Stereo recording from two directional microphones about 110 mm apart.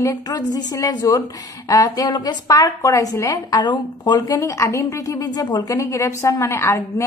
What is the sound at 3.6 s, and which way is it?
A woman's voice, 40° left (ahead or behind).